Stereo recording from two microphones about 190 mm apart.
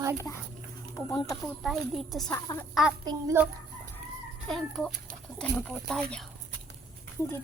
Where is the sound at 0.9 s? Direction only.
15° left (ahead or behind).